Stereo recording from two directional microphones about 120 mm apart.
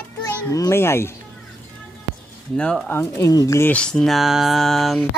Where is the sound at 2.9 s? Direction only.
25° left (ahead or behind).